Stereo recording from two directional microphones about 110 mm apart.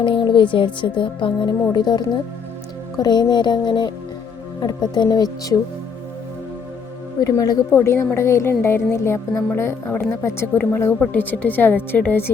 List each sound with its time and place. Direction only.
0.0 s speech: 45° left (ahead or behind)
7.3 s a woman's voice: 30° left (ahead or behind); by 12.2 s 15° left (ahead or behind)